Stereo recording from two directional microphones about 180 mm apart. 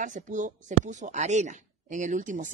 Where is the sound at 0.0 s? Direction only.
45° right (ahead or behind).